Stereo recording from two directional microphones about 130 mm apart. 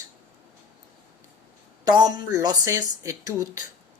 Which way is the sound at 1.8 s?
30° right (ahead or behind).